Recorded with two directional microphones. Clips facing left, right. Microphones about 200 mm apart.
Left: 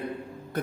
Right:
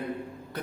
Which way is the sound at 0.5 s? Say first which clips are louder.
Left 5 dB; 50° left (ahead or behind).